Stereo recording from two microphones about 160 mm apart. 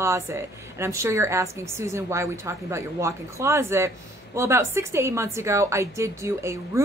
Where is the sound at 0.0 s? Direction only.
15° right (ahead or behind).